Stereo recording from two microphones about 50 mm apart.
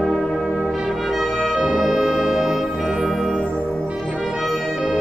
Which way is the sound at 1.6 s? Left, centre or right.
Centre.